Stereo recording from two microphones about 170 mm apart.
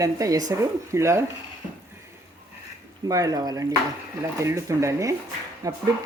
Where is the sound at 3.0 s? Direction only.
20° right (ahead or behind).